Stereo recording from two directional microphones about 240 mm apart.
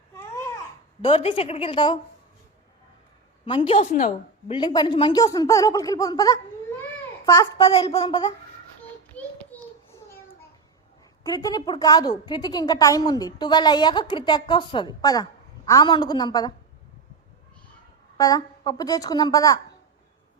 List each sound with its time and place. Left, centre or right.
0.1 s babbling: centre
1.0 s a woman's voice: left
3.4 s a woman's voice: left
4.5 s a woman's voice: centre
7.7 s a woman's voice: left
9.1 s a sound: centre
11.2 s a woman's voice: centre
18.2 s a woman's voice: centre